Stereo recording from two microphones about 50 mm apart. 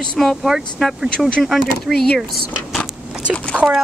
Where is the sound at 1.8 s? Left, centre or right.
Centre.